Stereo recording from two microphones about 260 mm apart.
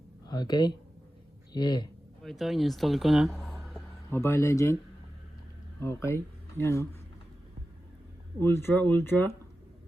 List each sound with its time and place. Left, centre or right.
0.3 s speech: centre
2.2 s speech: centre
5.8 s speech: centre
8.4 s speech: centre